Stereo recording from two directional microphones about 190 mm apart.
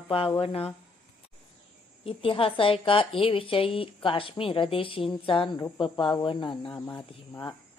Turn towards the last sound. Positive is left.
turn(degrees=20)  # may be behind; listen again after turning